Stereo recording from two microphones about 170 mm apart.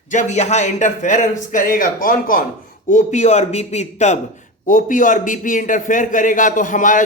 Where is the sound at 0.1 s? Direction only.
45° left (ahead or behind).